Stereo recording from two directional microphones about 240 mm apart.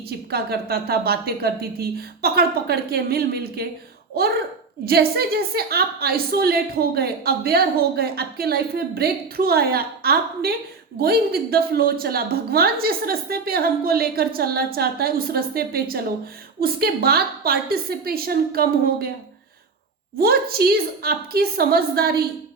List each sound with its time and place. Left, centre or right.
0.3 s a woman's voice: right
4.9 s a woman's voice: right
20.1 s a woman's voice: right